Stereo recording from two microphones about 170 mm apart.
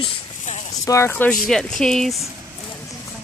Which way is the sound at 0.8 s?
15° left (ahead or behind).